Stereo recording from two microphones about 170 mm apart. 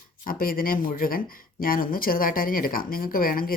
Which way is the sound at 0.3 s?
60° left (ahead or behind).